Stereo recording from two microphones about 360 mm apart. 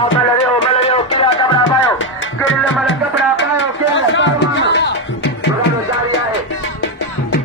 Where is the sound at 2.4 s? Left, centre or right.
Left.